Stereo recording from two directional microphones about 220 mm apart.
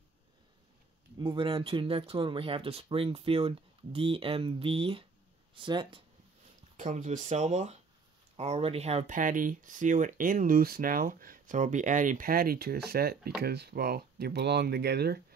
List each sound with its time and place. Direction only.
1.2 s speech: 25° right (ahead or behind)
6.8 s speech: 35° right (ahead or behind)